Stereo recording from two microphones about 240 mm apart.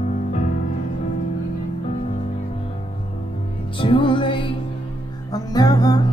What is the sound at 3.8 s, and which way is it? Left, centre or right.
Music, centre.